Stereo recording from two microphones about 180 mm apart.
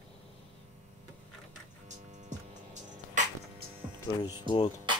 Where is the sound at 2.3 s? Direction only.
40° right (ahead or behind).